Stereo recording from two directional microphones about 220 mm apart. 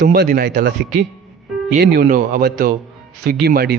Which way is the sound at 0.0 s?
45° right (ahead or behind).